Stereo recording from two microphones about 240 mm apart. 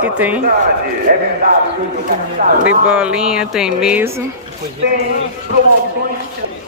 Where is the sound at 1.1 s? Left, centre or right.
Right.